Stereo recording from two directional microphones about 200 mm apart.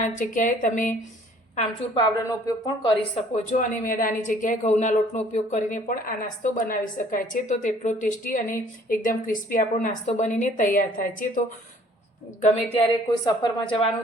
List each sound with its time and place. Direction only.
0.0 s a woman's voice: 40° left (ahead or behind)
1.5 s speech: 30° left (ahead or behind)
2.2 s speech: 20° left (ahead or behind)
3.3 s a woman's voice: 35° left (ahead or behind)
12.4 s a woman's voice: 35° left (ahead or behind)